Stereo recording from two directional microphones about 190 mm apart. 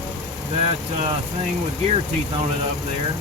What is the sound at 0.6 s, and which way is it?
Speech, 35° right (ahead or behind).